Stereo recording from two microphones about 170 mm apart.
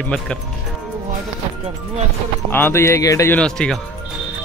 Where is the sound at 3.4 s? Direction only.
5° left (ahead or behind).